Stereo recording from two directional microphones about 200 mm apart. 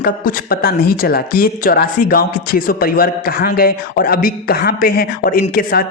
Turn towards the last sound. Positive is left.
turn(degrees=50)  # may be behind; listen again after turning